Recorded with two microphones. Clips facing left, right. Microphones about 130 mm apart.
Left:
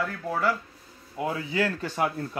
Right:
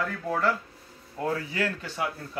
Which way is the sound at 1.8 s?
45° left (ahead or behind).